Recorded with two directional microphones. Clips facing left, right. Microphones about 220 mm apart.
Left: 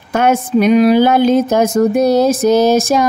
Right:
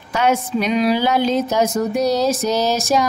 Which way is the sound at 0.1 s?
50° left (ahead or behind).